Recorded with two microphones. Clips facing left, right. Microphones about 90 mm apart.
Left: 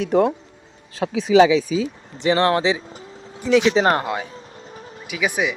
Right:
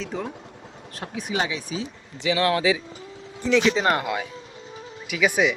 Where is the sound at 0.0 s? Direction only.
70° left (ahead or behind).